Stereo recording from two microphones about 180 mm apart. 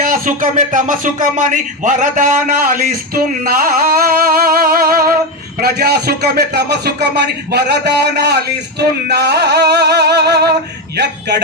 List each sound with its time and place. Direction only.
0.1 s speech: 45° right (ahead or behind)
3.4 s music: 50° right (ahead or behind); by 11.4 s 70° right (ahead or behind)